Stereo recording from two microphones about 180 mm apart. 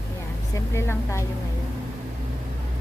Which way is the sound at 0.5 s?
15° left (ahead or behind).